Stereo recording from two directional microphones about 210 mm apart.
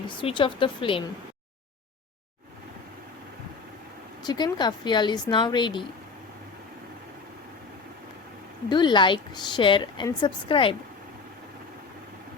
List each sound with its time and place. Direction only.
0.1 s a woman's voice: 25° left (ahead or behind)
4.2 s a woman's voice: 20° left (ahead or behind)
8.7 s a woman's voice: 20° left (ahead or behind)